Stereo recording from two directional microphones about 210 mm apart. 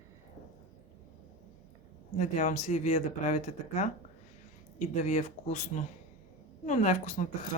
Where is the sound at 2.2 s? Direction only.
35° left (ahead or behind).